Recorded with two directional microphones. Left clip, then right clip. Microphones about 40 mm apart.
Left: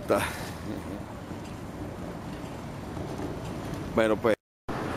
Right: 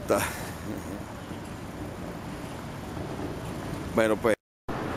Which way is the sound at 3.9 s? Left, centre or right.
Centre.